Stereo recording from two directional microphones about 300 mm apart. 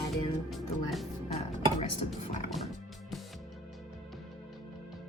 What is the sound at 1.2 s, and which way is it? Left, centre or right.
Chopping, left.